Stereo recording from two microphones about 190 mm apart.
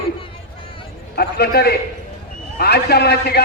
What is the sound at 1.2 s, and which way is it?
A man's voice, 55° left (ahead or behind).